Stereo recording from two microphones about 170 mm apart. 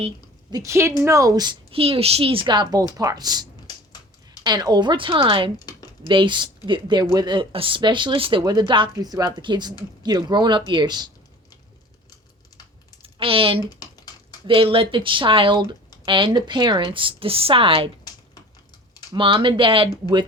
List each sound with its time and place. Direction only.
0.5 s a woman's voice: 15° right (ahead or behind)
4.4 s speech: 25° right (ahead or behind)
5.5 s a sound: 25° left (ahead or behind)
6.1 s speech: 30° right (ahead or behind)
13.0 s typing: 30° right (ahead or behind)
13.7 s typing: 25° left (ahead or behind)
14.4 s speech: 30° right (ahead or behind)
19.1 s speech: 30° right (ahead or behind)